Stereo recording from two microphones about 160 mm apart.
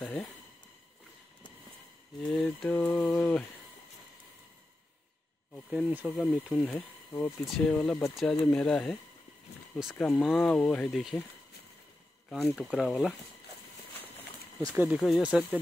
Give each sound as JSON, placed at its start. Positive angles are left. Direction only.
{"t": 0.0, "sound": "speech", "side_deg": 0}
{"t": 2.2, "sound": "speech", "side_deg": 0}
{"t": 2.7, "sound": "a sound", "side_deg": 10}
{"t": 5.7, "sound": "speech", "side_deg": -5}
{"t": 7.1, "sound": "speech", "side_deg": 25}
{"t": 7.5, "sound": "speech", "side_deg": 5}
{"t": 12.3, "sound": "speech", "side_deg": 0}
{"t": 15.0, "sound": "speech", "side_deg": 0}